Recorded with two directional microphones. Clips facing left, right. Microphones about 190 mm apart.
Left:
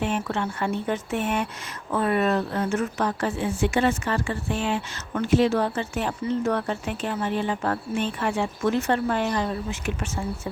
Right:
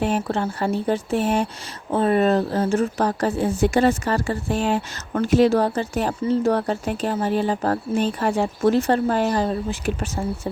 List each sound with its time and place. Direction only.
0.0 s speech: 35° right (ahead or behind)